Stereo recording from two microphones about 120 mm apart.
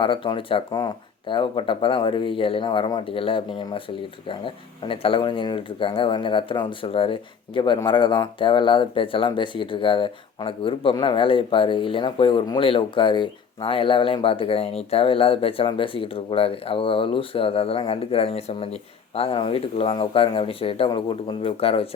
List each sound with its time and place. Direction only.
0.0 s speech: 45° left (ahead or behind)